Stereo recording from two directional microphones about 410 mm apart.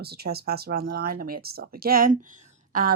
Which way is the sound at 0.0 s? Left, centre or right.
Right.